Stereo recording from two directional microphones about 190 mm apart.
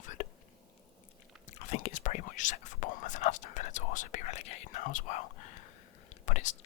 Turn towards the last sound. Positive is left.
turn(degrees=40)  # may be behind; listen again after turning